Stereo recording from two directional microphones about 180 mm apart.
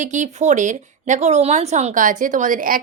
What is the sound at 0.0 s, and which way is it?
Speech, 40° right (ahead or behind).